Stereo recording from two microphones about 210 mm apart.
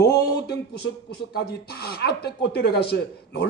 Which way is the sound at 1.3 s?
50° left (ahead or behind).